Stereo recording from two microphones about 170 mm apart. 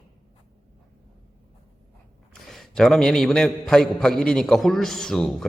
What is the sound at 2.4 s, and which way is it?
A man's voice, centre (ahead or behind).